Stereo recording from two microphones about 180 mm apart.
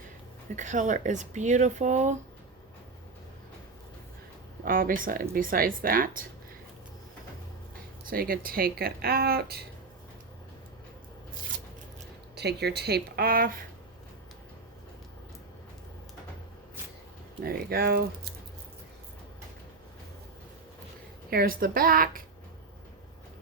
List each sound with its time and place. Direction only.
0.5 s speech: 45° right (ahead or behind)
4.6 s speech: 50° right (ahead or behind)
8.1 s speech: 55° right (ahead or behind)
12.4 s speech: 65° right (ahead or behind)
17.4 s speech: 55° right (ahead or behind)
21.2 s speech: 55° right (ahead or behind)